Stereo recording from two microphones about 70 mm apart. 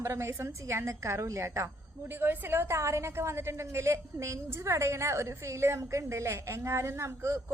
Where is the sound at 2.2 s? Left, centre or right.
Right.